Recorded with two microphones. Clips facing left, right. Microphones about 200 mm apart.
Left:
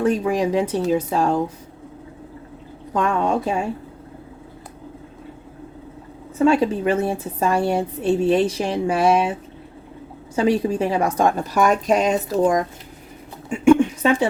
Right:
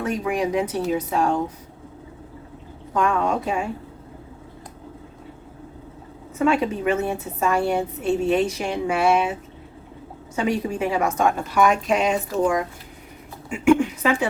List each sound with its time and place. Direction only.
0.0 s a woman's voice: 30° left (ahead or behind)
2.9 s a woman's voice: 30° left (ahead or behind)
6.4 s a woman's voice: 35° left (ahead or behind)
13.5 s a sound: 30° left (ahead or behind)